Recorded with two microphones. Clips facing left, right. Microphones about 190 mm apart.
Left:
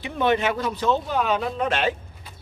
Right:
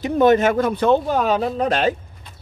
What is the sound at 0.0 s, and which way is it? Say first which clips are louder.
Speech: right 7 dB; 45° right (ahead or behind).